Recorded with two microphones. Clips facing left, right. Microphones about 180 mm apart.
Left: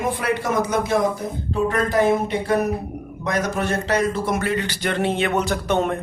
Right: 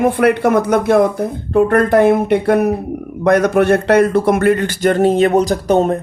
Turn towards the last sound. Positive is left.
turn(degrees=-35)  # may be behind; listen again after turning